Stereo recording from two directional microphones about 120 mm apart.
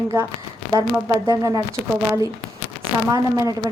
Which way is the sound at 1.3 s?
30° right (ahead or behind).